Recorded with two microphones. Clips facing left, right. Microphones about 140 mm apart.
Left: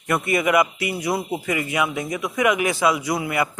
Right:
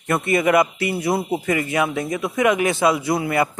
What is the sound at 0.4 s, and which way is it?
Speech, 30° right (ahead or behind).